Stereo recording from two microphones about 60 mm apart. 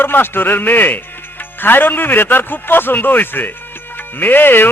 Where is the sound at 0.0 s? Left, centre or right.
Left.